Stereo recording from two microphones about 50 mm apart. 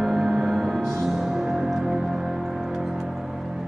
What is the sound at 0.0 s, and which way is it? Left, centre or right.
Music, centre.